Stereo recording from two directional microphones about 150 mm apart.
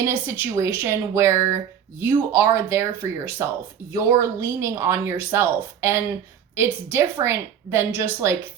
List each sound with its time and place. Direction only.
0.0 s speech: 20° right (ahead or behind)